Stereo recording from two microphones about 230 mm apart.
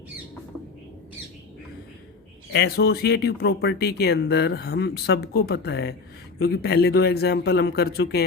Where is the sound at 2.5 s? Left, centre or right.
Left.